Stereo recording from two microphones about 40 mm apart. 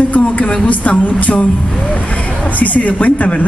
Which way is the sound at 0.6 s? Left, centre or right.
Left.